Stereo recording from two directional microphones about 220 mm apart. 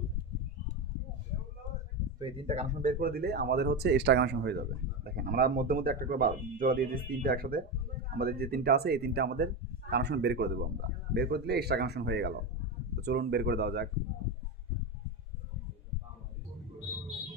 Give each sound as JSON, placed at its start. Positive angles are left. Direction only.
{"t": 2.1, "sound": "speech", "side_deg": -25}